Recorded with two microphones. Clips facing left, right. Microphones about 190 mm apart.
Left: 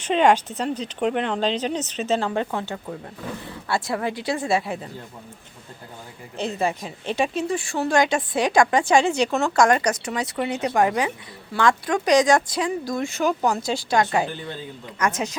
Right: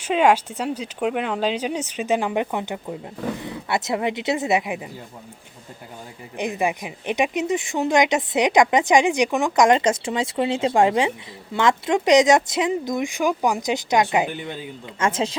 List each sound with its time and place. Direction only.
0.0 s speech: 5° right (ahead or behind)
6.3 s speech: 15° right (ahead or behind)